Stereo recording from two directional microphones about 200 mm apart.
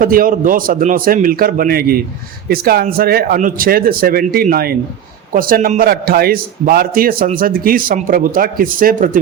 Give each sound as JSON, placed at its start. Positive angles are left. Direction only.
{"t": 0.0, "sound": "a man's voice", "side_deg": -45}